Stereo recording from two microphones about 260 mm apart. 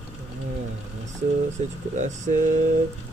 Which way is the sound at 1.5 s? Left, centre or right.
Right.